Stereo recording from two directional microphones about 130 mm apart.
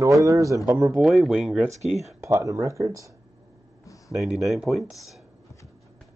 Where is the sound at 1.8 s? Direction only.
60° right (ahead or behind).